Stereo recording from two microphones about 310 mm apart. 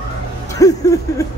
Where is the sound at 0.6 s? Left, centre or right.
Centre.